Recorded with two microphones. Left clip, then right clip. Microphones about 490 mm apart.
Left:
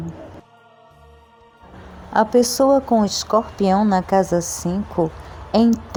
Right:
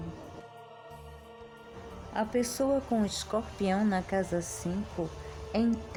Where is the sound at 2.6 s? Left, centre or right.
Left.